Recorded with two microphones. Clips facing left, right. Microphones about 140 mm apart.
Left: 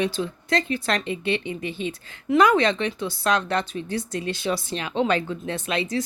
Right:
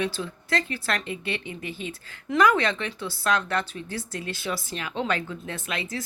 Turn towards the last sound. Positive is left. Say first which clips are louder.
# left 6 dB
turn(degrees=25)  # may be behind; listen again after turning